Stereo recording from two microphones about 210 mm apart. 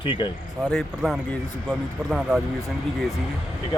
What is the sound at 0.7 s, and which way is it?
Speech, centre (ahead or behind).